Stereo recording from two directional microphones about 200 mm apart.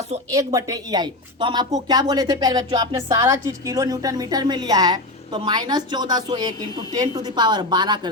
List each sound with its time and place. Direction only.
0.3 s speech: 15° right (ahead or behind)